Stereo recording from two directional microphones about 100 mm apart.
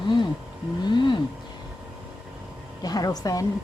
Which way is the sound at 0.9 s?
50° left (ahead or behind).